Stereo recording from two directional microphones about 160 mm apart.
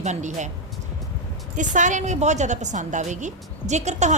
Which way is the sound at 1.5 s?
50° right (ahead or behind).